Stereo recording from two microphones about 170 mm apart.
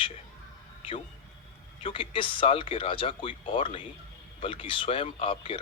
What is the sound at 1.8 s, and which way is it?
Speech, 30° left (ahead or behind).